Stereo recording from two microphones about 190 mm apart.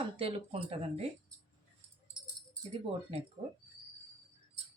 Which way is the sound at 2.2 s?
25° right (ahead or behind).